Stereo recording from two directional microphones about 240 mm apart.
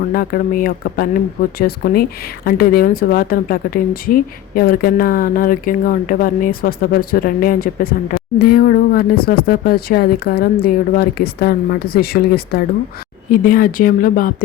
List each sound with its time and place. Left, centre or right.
0.1 s speech: left